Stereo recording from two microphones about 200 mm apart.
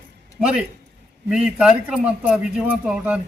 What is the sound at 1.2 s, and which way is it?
A man's voice, 5° right (ahead or behind).